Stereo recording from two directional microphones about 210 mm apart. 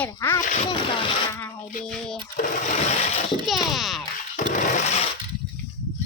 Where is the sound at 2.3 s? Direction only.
35° left (ahead or behind).